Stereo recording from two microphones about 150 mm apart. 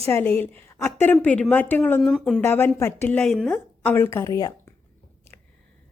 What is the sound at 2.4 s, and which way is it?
A woman's voice, 15° left (ahead or behind).